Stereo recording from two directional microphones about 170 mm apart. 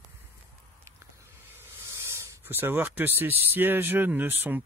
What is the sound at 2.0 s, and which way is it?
Speech, 15° right (ahead or behind).